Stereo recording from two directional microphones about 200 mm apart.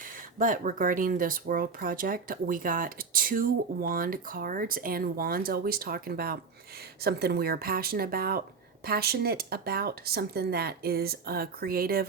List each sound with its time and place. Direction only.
0.3 s speech: 40° right (ahead or behind)